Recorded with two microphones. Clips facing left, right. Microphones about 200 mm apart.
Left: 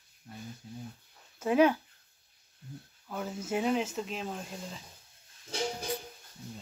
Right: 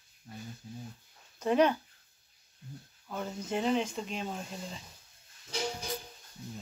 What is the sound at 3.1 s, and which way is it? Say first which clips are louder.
Speech: left 1 dB; 5° left (ahead or behind).